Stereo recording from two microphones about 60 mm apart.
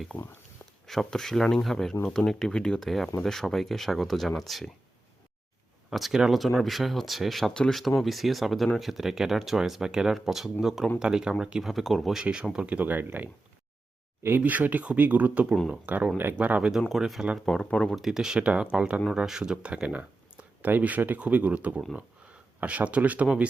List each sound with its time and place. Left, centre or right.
0.9 s speech: centre
5.9 s speech: centre
7.5 s speech: centre
7.8 s speech: centre
11.7 s speech: centre
12.2 s speech: centre; by 14.4 s right
14.4 s speech: right
16.9 s speech: centre
17.9 s speech: centre